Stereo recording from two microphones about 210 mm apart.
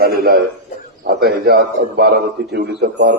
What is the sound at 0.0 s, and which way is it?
A man's voice, 45° right (ahead or behind).